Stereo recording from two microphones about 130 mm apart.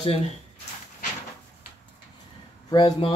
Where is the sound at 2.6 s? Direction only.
30° left (ahead or behind).